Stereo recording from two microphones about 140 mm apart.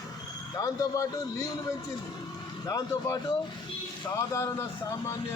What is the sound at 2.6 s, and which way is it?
Speech, 25° left (ahead or behind).